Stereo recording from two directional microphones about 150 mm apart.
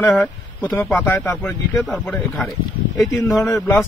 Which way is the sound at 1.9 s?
Centre (ahead or behind).